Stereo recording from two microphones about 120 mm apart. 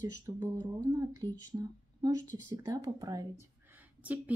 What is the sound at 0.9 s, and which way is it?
Speech, 25° right (ahead or behind).